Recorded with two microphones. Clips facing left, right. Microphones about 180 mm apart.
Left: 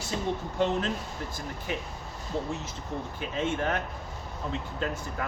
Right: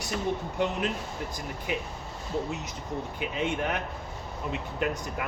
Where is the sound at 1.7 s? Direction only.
15° right (ahead or behind).